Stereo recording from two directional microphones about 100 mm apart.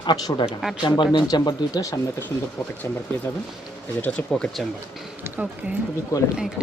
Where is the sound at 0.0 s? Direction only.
50° left (ahead or behind).